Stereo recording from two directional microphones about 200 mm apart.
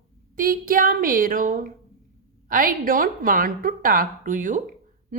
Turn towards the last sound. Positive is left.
turn(degrees=-40)  # may be behind; listen again after turning